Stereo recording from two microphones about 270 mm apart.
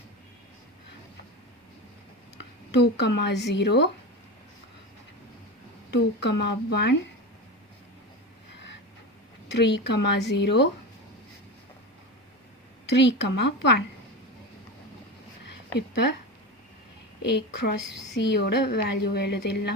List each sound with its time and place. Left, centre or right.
2.7 s a woman's voice: left
5.9 s a woman's voice: left
9.5 s a woman's voice: left
12.8 s a woman's voice: left
17.2 s a woman's voice: left